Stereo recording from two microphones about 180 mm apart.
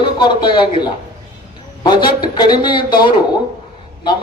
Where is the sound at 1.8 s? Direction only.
25° left (ahead or behind).